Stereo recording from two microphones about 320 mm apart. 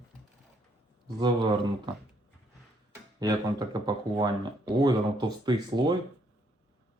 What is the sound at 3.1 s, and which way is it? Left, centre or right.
Speech, centre.